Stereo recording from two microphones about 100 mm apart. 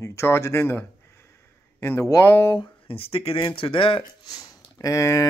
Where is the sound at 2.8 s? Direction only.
70° left (ahead or behind).